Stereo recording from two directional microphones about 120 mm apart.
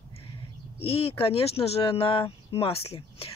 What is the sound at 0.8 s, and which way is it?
Speech, 55° left (ahead or behind).